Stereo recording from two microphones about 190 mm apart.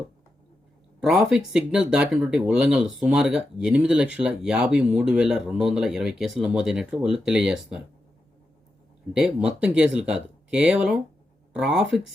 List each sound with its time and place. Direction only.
0.9 s speech: 5° right (ahead or behind)
9.1 s speech: 5° right (ahead or behind)